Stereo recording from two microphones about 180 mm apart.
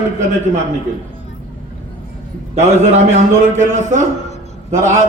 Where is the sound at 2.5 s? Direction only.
40° right (ahead or behind).